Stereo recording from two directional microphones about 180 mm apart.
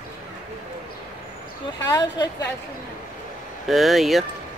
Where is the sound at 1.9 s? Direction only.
25° left (ahead or behind).